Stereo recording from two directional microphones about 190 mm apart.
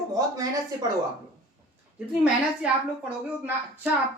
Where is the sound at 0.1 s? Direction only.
20° right (ahead or behind).